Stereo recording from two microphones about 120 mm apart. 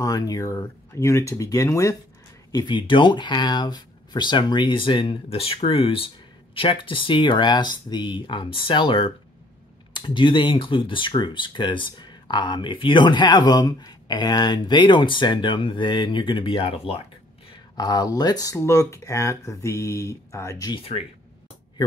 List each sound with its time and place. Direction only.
0.0 s speech: 30° left (ahead or behind)
2.5 s speech: 40° left (ahead or behind)
17.7 s speech: 35° left (ahead or behind)
20.7 s speech: 55° left (ahead or behind)